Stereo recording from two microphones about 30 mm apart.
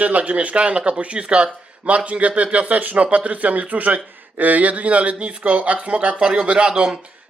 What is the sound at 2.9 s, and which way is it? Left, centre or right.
Speech, right.